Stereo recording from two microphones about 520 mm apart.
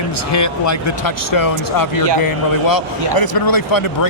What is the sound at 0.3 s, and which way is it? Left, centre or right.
Speech, left.